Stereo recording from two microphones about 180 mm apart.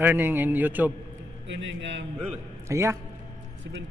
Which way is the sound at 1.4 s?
80° right.